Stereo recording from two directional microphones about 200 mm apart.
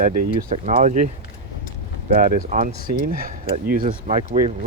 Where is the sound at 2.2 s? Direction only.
40° right (ahead or behind).